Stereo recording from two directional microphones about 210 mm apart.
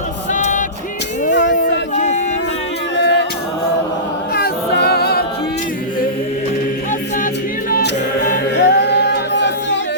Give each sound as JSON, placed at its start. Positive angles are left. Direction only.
{"t": 0.3, "sound": "music", "side_deg": 40}
{"t": 1.3, "sound": "a sound", "side_deg": 55}
{"t": 2.0, "sound": "a sound", "side_deg": 35}
{"t": 2.9, "sound": "music", "side_deg": 55}
{"t": 4.4, "sound": "a capella", "side_deg": 50}
{"t": 7.7, "sound": "a capella", "side_deg": 40}